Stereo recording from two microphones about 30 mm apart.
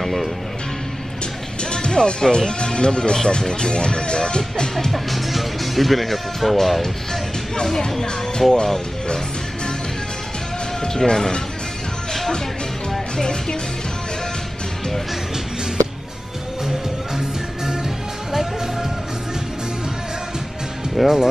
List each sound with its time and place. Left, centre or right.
0.0 s speech: centre
1.6 s music: left
2.3 s speech: left
4.9 s speech: centre
8.0 s speech: centre
10.8 s speech: left
13.2 s speech: left
18.3 s music: centre
21.0 s speech: centre